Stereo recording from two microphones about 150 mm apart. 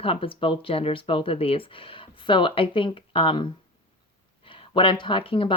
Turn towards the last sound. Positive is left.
turn(degrees=35)  # may be behind; listen again after turning